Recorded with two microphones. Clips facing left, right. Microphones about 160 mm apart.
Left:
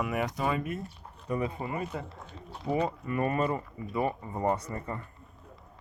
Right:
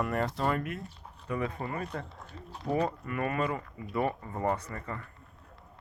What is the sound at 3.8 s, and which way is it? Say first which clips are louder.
Speech: right 1 dB; 5° left (ahead or behind).